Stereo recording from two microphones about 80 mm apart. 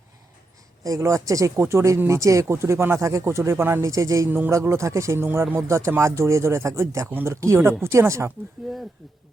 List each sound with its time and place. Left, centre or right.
0.9 s speech: right
4.3 s speech: right
4.5 s speech: right
5.2 s speech: right
5.6 s speech: right
7.1 s speech: right
7.3 s speech: right
8.6 s speech: centre